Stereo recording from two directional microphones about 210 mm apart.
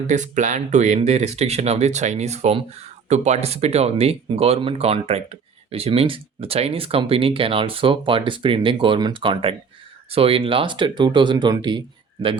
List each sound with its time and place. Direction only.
0.1 s speech: 35° right (ahead or behind); by 11.8 s 20° right (ahead or behind)